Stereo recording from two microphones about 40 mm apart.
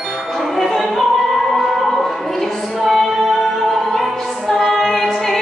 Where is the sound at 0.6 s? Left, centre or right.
Centre.